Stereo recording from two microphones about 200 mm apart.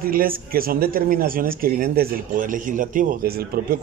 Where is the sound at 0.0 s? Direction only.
45° right (ahead or behind).